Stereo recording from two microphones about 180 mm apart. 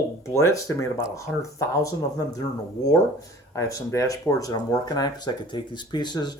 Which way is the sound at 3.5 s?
15° left (ahead or behind).